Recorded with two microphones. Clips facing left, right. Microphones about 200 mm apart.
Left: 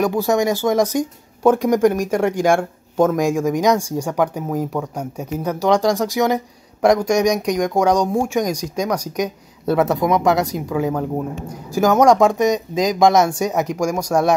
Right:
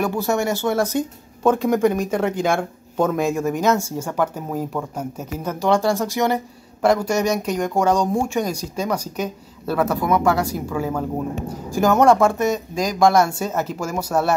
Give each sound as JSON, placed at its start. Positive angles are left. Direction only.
{"t": 0.0, "sound": "speech", "side_deg": 15}